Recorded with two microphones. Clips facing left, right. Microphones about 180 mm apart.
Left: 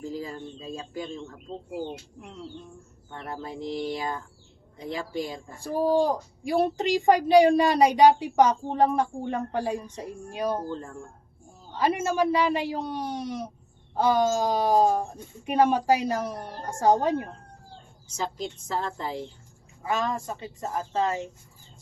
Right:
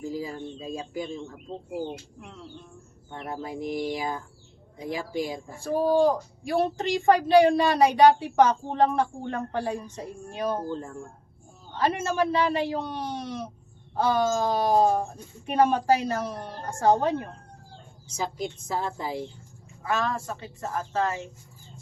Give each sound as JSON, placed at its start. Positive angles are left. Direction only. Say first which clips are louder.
{"t": 0.1, "sound": "speech", "louder": "right 2 dB", "side_deg": -10}
{"t": 3.1, "sound": "speech", "louder": "right 2 dB", "side_deg": -15}
{"t": 6.0, "sound": "speech", "louder": "right 3 dB", "side_deg": 15}
{"t": 11.8, "sound": "speech", "louder": "left 1 dB", "side_deg": 15}
{"t": 18.2, "sound": "speech", "louder": "right 1 dB", "side_deg": -10}
{"t": 19.8, "sound": "speech", "louder": "even", "side_deg": 15}